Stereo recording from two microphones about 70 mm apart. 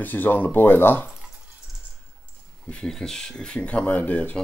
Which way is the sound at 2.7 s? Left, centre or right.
Centre.